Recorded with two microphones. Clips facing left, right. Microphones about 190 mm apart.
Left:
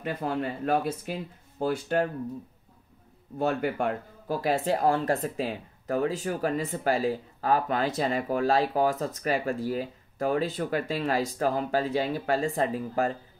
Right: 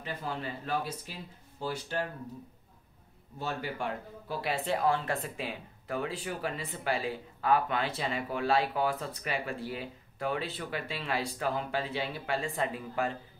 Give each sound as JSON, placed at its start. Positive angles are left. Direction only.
{"t": 0.0, "sound": "speech", "side_deg": 55}
{"t": 3.3, "sound": "speech", "side_deg": 55}